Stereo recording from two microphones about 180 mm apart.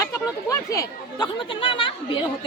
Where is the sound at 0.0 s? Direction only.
20° left (ahead or behind).